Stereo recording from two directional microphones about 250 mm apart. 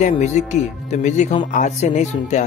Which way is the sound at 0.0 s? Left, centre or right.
Left.